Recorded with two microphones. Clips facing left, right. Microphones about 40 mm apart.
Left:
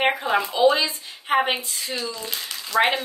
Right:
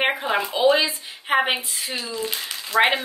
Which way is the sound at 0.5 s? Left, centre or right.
Right.